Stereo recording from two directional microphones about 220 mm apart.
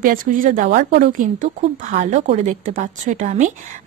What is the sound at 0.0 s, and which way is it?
A woman's voice, 40° right (ahead or behind).